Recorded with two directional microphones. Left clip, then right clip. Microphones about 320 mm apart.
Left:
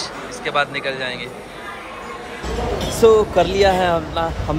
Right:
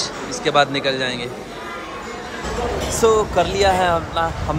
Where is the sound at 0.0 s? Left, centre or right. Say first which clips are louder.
Right 3 dB; centre.